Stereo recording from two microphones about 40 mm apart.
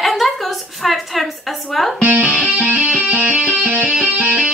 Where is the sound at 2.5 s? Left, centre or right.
Centre.